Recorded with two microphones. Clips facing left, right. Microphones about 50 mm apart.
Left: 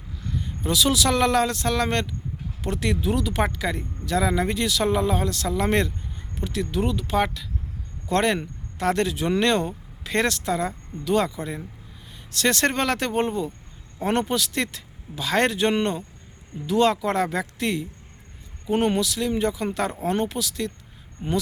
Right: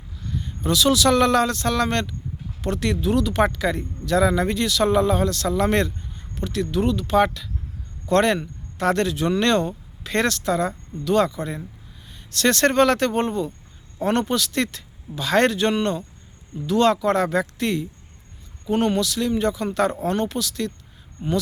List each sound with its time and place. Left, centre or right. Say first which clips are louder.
0.6 s speech: right 3 dB; centre
21.2 s speech: right 2 dB; left